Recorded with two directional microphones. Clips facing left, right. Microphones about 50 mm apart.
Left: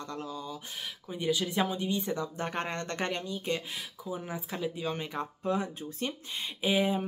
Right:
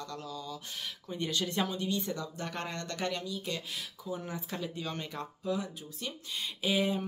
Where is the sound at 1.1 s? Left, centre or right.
Centre; by 3.8 s left.